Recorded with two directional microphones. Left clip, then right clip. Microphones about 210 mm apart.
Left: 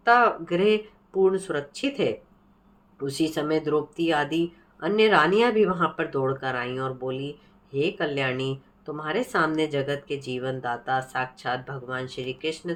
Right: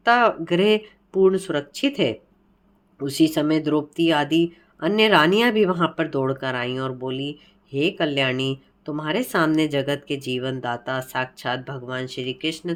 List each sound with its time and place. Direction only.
0.0 s speech: 55° right (ahead or behind)